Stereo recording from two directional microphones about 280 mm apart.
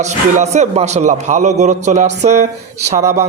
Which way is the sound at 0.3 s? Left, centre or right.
Right.